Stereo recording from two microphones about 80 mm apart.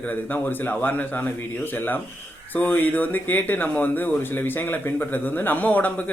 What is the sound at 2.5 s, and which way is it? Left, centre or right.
A man's voice, left.